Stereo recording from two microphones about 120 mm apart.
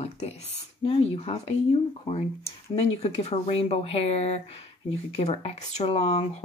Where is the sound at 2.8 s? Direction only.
60° left (ahead or behind).